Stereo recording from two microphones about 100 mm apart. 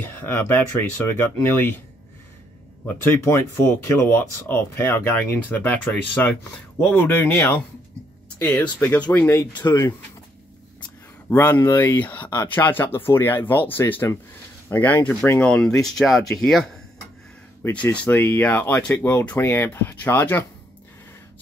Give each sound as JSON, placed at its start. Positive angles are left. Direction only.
{"t": 0.2, "sound": "speech", "side_deg": 20}
{"t": 2.9, "sound": "speech", "side_deg": 25}
{"t": 9.5, "sound": "speech", "side_deg": 45}
{"t": 11.2, "sound": "speech", "side_deg": 25}
{"t": 17.9, "sound": "speech", "side_deg": 20}